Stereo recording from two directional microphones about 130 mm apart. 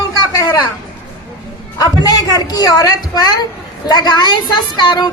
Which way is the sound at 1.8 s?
30° left (ahead or behind).